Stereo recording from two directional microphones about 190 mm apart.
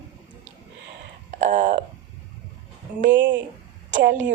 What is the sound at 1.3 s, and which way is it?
Speech, 40° right (ahead or behind).